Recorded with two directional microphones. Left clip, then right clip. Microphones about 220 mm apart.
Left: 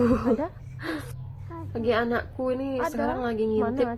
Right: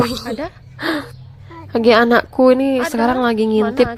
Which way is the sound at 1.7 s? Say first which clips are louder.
Right 14 dB; 45° right (ahead or behind).